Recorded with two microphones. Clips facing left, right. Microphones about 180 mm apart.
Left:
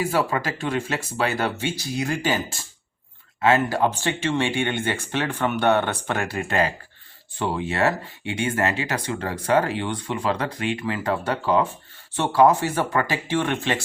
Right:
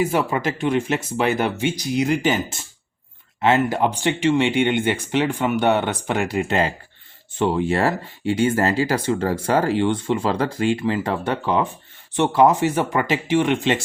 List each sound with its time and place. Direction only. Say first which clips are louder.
0.0 s speech: right 3 dB; 20° right (ahead or behind)